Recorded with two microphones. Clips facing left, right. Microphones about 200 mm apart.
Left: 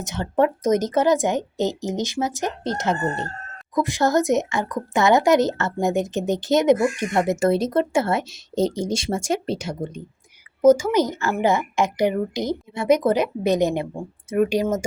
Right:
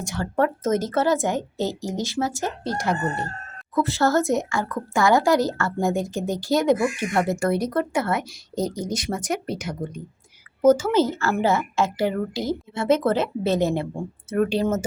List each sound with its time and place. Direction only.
0.0 s a woman's voice: 20° left (ahead or behind)
10.6 s a woman's voice: 10° left (ahead or behind)